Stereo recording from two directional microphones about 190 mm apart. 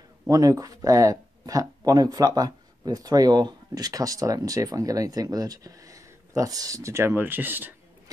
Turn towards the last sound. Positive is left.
turn(degrees=-10)  # may be behind; listen again after turning